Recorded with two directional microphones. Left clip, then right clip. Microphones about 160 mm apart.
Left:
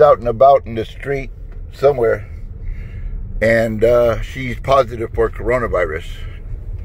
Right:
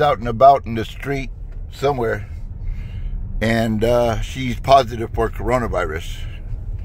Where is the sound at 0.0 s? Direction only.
30° right (ahead or behind).